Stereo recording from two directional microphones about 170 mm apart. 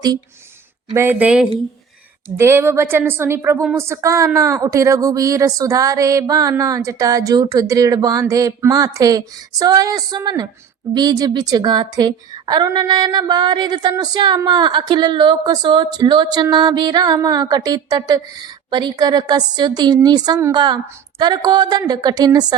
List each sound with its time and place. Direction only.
0.9 s a woman's voice: 15° right (ahead or behind)